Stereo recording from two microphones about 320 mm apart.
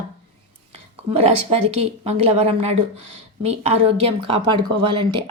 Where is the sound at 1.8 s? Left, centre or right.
Centre.